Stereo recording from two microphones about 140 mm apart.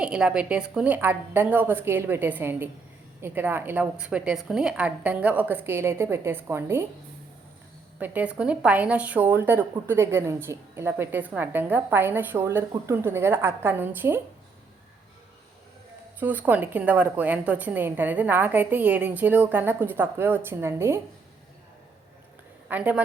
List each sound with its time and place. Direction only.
0.0 s a woman's voice: 5° right (ahead or behind)
7.9 s a woman's voice: 10° right (ahead or behind)
16.2 s a woman's voice: 10° right (ahead or behind)
22.7 s a woman's voice: 10° right (ahead or behind)